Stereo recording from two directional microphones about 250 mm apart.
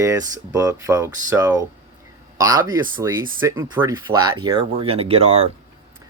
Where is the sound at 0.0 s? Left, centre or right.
Centre.